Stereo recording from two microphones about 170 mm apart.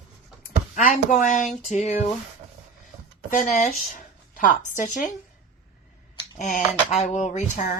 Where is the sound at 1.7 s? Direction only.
40° left (ahead or behind).